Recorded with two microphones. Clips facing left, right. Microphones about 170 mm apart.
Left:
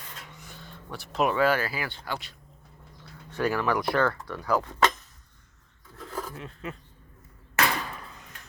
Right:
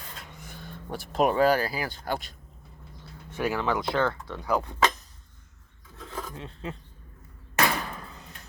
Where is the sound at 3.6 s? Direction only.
20° right (ahead or behind).